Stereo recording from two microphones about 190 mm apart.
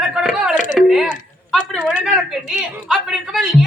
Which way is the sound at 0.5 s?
40° left (ahead or behind).